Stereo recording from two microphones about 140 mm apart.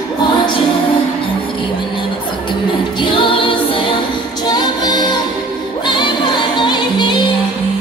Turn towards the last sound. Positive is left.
turn(degrees=35)  # may be behind; listen again after turning